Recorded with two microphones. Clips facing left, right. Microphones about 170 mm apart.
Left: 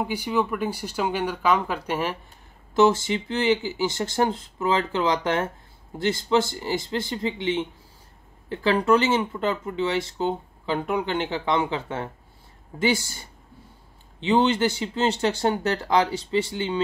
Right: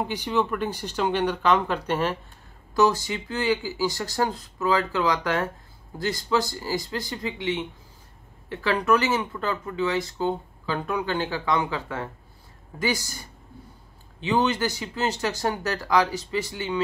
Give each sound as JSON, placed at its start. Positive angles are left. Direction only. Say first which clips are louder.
{"t": 0.0, "sound": "speech", "louder": "left 1 dB", "side_deg": 10}
{"t": 2.7, "sound": "speech", "louder": "left 3 dB", "side_deg": 25}